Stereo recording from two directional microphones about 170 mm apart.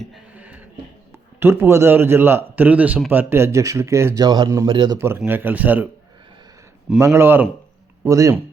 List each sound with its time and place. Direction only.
0.0 s a sound: 5° right (ahead or behind)
1.4 s a man's voice: 15° right (ahead or behind)
4.9 s a man's voice: 15° right (ahead or behind)
7.0 s a man's voice: 15° right (ahead or behind)